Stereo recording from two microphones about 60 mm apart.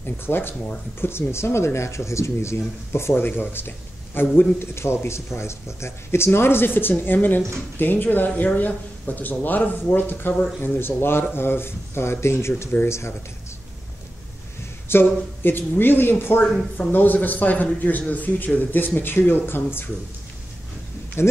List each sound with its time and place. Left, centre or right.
0.0 s speech: left
14.9 s speech: left
21.2 s speech: left